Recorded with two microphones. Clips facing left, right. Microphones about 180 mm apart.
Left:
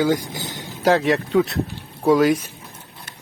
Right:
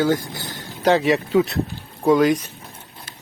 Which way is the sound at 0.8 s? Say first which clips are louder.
Even; centre (ahead or behind).